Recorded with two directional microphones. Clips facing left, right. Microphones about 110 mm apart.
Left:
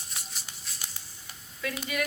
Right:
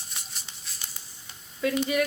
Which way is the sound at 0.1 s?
Centre (ahead or behind).